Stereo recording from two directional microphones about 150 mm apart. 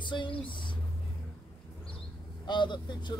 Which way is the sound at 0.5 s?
35° left (ahead or behind).